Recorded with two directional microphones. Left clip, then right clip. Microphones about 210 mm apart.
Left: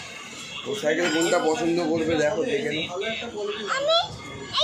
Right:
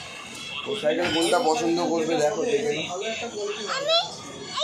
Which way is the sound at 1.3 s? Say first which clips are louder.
Right 1 dB; 35° left (ahead or behind).